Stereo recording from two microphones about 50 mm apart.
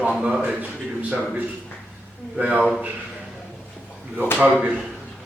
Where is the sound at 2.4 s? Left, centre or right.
Right.